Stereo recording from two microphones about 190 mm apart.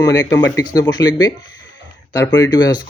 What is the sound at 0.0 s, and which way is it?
Speech, 15° left (ahead or behind).